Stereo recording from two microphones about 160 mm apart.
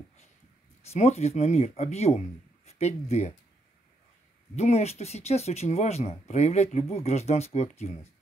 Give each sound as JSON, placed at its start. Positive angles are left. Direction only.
{"t": 0.8, "sound": "a man's voice", "side_deg": 45}
{"t": 4.6, "sound": "speech", "side_deg": 45}